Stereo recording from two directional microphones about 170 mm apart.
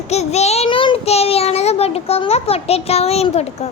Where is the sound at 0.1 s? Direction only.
40° left (ahead or behind).